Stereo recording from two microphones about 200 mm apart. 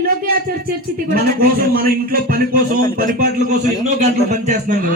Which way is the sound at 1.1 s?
45° right (ahead or behind).